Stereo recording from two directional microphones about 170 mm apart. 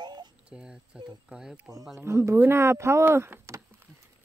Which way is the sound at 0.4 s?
5° right (ahead or behind).